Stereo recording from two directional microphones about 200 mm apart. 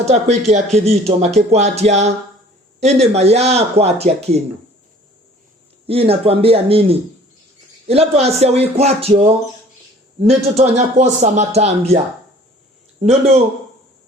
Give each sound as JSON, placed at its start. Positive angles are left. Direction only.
{"t": 0.0, "sound": "speech", "side_deg": -35}
{"t": 5.8, "sound": "speech", "side_deg": -30}
{"t": 7.9, "sound": "speech", "side_deg": -30}
{"t": 10.6, "sound": "speech", "side_deg": -35}
{"t": 13.0, "sound": "speech", "side_deg": -35}